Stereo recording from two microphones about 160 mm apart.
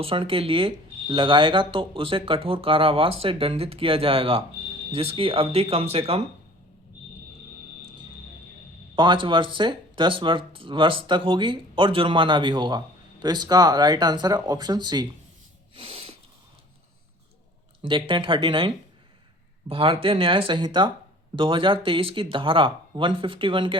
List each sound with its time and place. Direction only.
0.0 s speech: 35° right (ahead or behind)
9.0 s speech: 30° right (ahead or behind)
15.7 s a sound: 35° right (ahead or behind)
17.8 s speech: 30° right (ahead or behind)